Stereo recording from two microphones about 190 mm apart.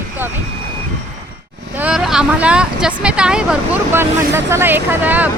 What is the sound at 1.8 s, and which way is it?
Speech, 5° right (ahead or behind).